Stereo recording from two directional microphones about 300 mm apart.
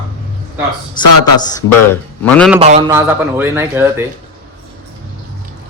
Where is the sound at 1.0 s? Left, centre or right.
Centre.